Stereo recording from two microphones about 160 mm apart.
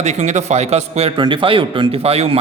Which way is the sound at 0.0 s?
45° right (ahead or behind).